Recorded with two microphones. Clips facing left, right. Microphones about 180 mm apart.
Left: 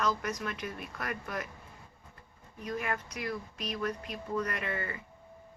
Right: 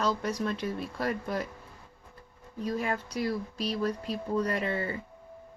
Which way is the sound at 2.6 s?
30° right (ahead or behind).